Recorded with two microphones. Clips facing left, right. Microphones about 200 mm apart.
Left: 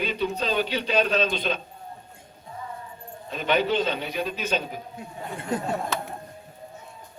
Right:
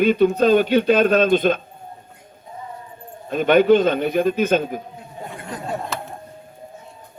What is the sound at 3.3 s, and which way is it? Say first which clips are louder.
A man's voice: right 10 dB; 50° right (ahead or behind).